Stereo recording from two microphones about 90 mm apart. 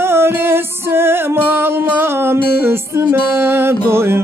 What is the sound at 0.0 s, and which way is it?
Music, 25° right (ahead or behind).